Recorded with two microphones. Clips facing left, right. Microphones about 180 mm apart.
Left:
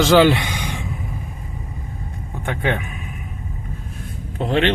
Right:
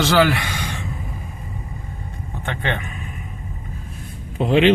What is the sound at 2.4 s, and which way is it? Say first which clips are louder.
Speech: left 3 dB; 10° left (ahead or behind).